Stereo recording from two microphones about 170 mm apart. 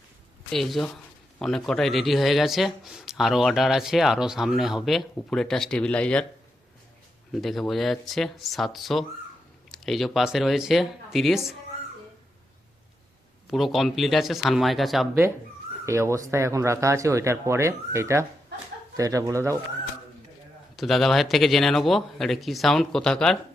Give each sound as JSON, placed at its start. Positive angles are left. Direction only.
{"t": 0.5, "sound": "speech", "side_deg": 0}
{"t": 7.4, "sound": "speech", "side_deg": 0}
{"t": 13.5, "sound": "speech", "side_deg": 0}
{"t": 15.9, "sound": "speech", "side_deg": -15}
{"t": 20.7, "sound": "speech", "side_deg": 0}